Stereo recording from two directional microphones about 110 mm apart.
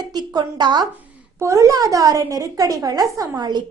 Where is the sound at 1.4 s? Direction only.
30° right (ahead or behind).